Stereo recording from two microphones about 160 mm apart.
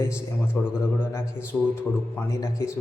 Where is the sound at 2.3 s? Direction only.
20° left (ahead or behind).